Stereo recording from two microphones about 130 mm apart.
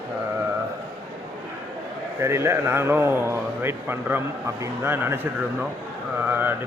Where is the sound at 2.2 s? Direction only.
20° right (ahead or behind).